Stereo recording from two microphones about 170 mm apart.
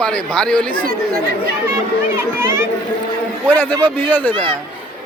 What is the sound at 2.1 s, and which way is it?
Speech, 15° right (ahead or behind).